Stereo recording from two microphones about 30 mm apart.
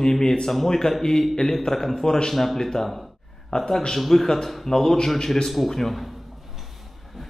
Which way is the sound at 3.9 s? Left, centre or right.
Centre.